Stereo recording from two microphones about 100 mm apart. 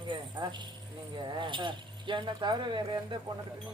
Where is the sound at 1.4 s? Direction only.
55° right (ahead or behind).